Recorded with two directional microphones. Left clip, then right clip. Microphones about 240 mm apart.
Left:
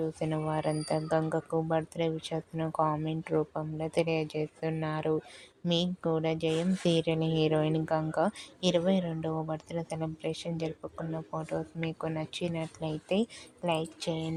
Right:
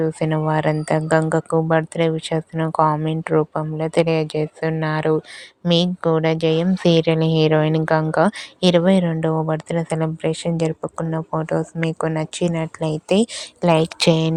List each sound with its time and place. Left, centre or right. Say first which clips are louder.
0.0 s speech: right 12 dB; right